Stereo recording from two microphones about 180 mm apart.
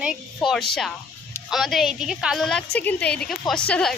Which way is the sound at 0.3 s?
Centre (ahead or behind).